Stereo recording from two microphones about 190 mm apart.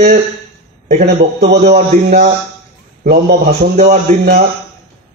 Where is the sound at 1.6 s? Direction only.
35° right (ahead or behind).